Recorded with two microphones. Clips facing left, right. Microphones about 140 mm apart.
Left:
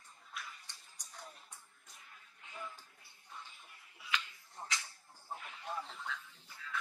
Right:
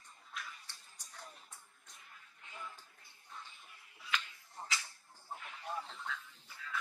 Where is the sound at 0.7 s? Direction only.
15° left (ahead or behind).